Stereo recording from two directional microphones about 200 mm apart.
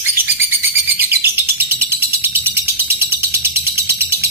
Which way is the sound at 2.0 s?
10° right (ahead or behind).